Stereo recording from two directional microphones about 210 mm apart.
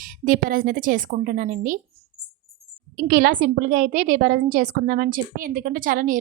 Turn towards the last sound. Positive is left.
turn(degrees=-40)  # may be behind; listen again after turning